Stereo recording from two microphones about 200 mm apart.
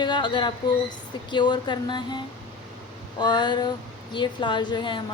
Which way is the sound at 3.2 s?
20° left (ahead or behind).